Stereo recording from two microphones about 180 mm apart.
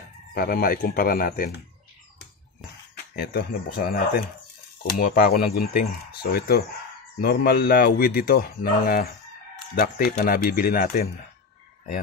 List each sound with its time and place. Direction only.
0.3 s speech: 55° left (ahead or behind)
3.2 s speech: 60° left (ahead or behind)